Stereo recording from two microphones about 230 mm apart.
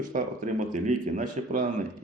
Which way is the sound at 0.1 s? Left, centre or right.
Right.